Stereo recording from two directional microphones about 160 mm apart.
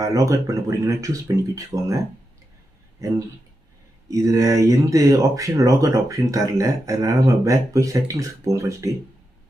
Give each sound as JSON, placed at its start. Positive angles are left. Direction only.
{"t": 0.0, "sound": "speech", "side_deg": -20}
{"t": 3.0, "sound": "speech", "side_deg": -20}